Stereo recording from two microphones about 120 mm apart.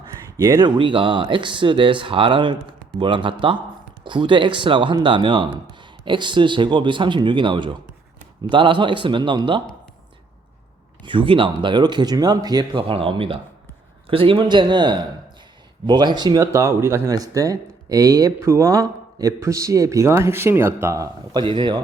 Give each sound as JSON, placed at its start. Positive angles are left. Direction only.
{"t": 0.6, "sound": "speech", "side_deg": -45}
{"t": 11.0, "sound": "speech", "side_deg": -45}
{"t": 12.9, "sound": "speech", "side_deg": -50}
{"t": 21.4, "sound": "speech", "side_deg": -45}